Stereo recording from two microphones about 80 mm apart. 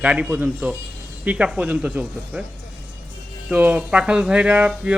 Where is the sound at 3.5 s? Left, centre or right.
Centre.